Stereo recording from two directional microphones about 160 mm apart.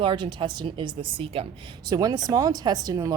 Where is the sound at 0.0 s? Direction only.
30° right (ahead or behind).